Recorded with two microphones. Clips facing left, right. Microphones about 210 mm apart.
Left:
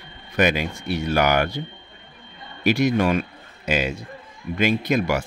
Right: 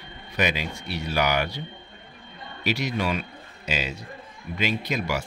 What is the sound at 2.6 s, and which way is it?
Speech, 50° left (ahead or behind).